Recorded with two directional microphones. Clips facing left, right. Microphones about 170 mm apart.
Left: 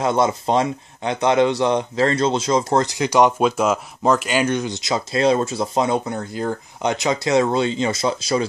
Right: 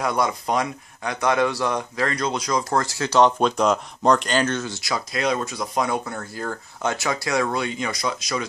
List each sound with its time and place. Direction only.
0.0 s speech: 25° left (ahead or behind)